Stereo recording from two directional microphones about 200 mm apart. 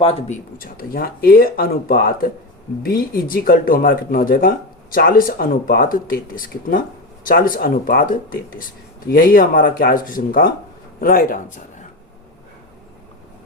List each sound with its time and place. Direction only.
0.0 s speech: 30° left (ahead or behind)
0.6 s speech: 45° left (ahead or behind)